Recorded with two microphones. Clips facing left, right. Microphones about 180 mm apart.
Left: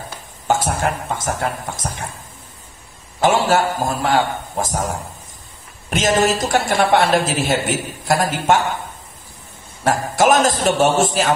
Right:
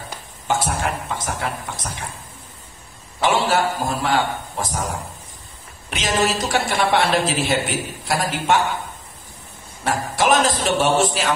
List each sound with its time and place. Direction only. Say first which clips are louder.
0.5 s speech: left 3 dB; 45° left (ahead or behind)
3.2 s a man's voice: left 3 dB; 45° left (ahead or behind)
9.8 s a woman's voice: left 4 dB; 45° left (ahead or behind)